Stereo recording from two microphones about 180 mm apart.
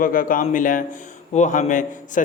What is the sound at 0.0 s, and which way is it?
A man's voice, 50° left (ahead or behind).